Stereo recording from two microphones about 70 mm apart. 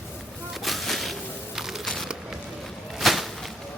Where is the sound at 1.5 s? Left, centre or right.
Centre.